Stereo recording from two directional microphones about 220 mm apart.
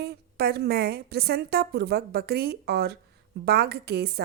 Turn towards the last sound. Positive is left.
turn(degrees=-45)  # may be behind; listen again after turning